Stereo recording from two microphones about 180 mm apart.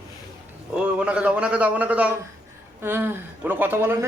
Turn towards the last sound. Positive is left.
turn(degrees=-10)  # may be behind; listen again after turning